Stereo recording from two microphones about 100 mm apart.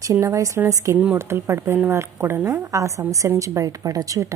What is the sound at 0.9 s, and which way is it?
Speech, 15° right (ahead or behind).